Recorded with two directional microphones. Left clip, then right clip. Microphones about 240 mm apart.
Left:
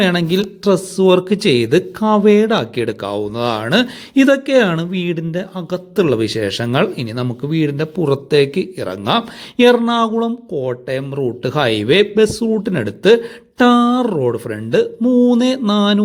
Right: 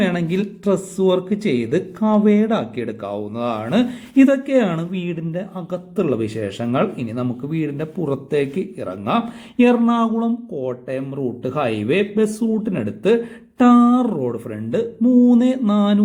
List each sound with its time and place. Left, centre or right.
0.0 s a man's voice: left
15.3 s a man's voice: left